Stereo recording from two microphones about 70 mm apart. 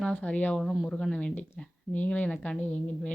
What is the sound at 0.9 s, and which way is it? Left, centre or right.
A woman's voice, centre.